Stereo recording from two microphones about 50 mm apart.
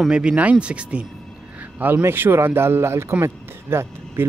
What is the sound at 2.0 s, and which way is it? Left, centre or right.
Speech, right.